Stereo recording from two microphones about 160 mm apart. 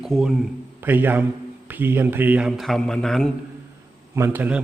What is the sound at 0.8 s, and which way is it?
A man's voice, 10° right (ahead or behind).